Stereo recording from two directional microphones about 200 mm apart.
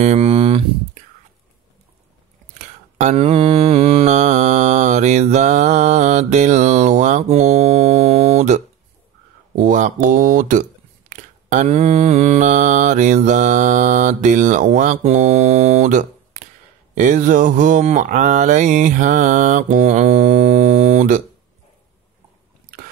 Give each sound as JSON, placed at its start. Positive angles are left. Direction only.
{"t": 0.0, "sound": "a sound", "side_deg": -35}
{"t": 2.6, "sound": "mantra", "side_deg": -35}
{"t": 9.7, "sound": "mantra", "side_deg": -40}